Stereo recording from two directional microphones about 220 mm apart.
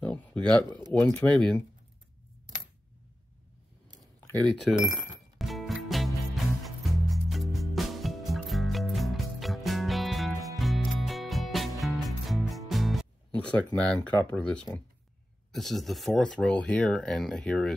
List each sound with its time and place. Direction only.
0.0 s speech: 5° left (ahead or behind)
4.8 s speech: 10° right (ahead or behind)
5.4 s music: centre (ahead or behind)
13.7 s speech: 5° left (ahead or behind)